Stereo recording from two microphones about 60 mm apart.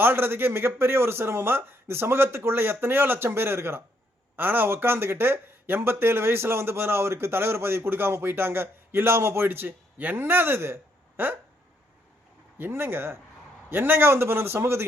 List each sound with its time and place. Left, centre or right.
0.0 s speech: right
12.5 s speech: right